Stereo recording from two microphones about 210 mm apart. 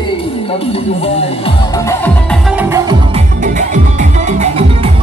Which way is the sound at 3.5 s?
35° right (ahead or behind).